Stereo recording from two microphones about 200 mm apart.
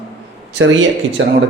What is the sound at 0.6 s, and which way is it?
Speech, 70° right (ahead or behind).